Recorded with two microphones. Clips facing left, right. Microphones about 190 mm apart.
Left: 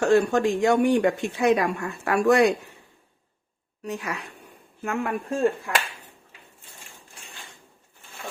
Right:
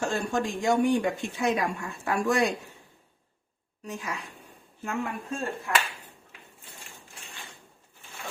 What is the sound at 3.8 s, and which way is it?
Speech, 65° left (ahead or behind).